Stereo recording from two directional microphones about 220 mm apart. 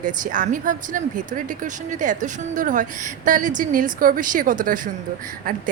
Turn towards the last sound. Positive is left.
turn(degrees=-40)  # may be behind; listen again after turning